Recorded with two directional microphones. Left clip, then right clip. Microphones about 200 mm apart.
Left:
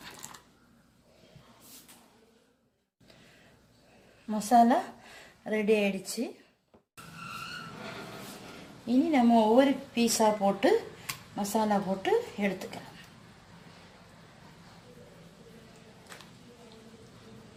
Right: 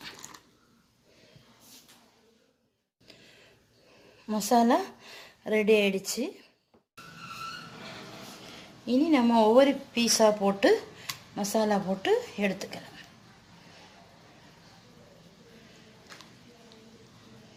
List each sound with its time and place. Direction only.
4.3 s speech: 50° right (ahead or behind)
8.9 s a woman's voice: 55° right (ahead or behind)